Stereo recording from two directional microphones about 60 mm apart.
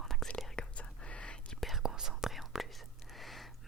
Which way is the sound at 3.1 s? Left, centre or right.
Centre.